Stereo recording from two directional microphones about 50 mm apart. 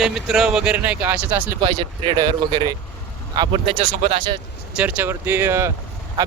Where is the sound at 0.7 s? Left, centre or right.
Right.